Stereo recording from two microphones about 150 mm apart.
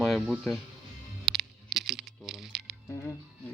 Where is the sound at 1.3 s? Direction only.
Centre (ahead or behind).